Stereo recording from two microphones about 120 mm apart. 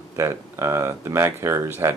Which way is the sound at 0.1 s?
25° right (ahead or behind).